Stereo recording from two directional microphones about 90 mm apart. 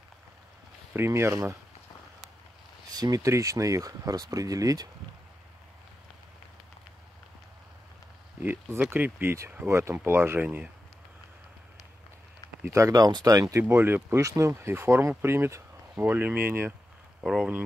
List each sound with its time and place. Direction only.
0.9 s speech: 30° right (ahead or behind)
2.9 s speech: 45° right (ahead or behind)
8.4 s speech: 25° right (ahead or behind)
9.7 s speech: 30° right (ahead or behind)
10.4 s speech: 15° right (ahead or behind)
12.7 s speech: 40° right (ahead or behind); by 16.7 s 25° right (ahead or behind)
17.2 s speech: 5° right (ahead or behind)